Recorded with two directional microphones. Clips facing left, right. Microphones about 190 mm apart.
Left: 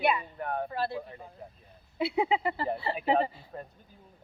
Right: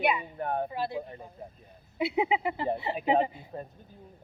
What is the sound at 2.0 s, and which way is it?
Speech, 15° right (ahead or behind).